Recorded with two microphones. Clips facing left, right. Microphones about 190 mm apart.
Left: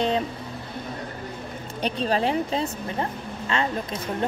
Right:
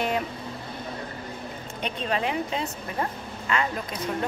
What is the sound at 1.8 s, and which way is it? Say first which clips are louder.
Speech: left 4 dB; 35° left (ahead or behind).